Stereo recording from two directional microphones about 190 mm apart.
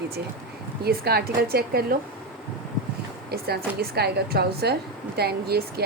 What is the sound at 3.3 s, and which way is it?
A woman's voice, 55° right (ahead or behind).